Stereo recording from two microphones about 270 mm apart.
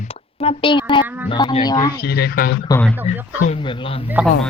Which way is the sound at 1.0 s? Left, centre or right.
Centre.